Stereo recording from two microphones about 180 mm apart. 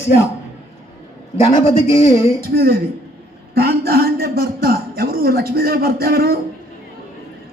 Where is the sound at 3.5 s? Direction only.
60° right (ahead or behind).